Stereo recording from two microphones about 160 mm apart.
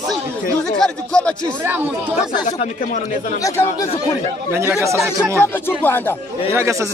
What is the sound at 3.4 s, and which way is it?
Speech, 20° left (ahead or behind).